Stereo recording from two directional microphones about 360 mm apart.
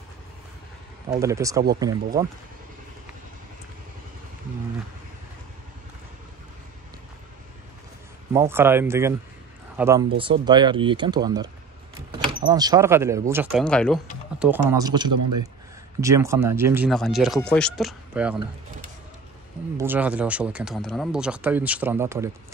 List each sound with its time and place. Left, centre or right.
1.1 s speech: centre
8.3 s speech: centre
15.1 s a man's voice: right
16.0 s speech: centre
19.8 s speech: centre